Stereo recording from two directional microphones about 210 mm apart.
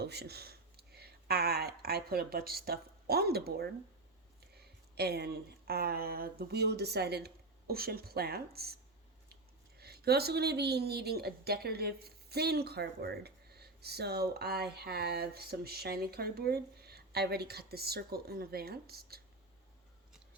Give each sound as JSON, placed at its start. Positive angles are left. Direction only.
{"t": 0.0, "sound": "a woman's voice", "side_deg": -50}